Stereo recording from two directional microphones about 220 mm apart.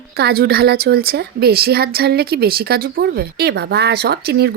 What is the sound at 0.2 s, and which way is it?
A woman's voice, 45° right (ahead or behind).